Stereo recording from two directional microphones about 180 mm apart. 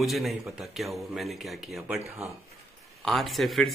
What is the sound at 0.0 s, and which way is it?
A man's voice, centre (ahead or behind).